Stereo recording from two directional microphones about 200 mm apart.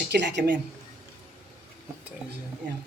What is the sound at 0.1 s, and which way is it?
Speech, 60° right (ahead or behind).